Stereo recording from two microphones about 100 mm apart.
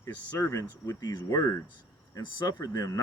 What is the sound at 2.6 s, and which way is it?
Speech, 30° left (ahead or behind).